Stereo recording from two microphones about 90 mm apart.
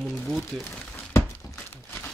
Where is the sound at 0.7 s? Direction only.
25° left (ahead or behind).